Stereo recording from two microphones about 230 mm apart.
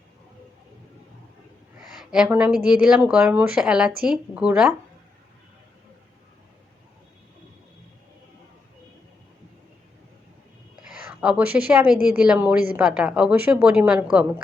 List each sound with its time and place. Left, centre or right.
2.0 s a woman's voice: centre
11.2 s a woman's voice: centre